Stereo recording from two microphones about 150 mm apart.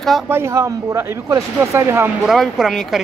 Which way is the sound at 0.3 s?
15° right (ahead or behind).